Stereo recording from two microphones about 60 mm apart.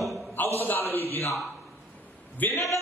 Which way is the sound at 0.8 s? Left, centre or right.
Left.